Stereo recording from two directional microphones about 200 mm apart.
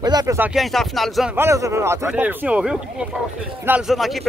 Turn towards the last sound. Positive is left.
turn(degrees=0)  # may be behind; listen again after turning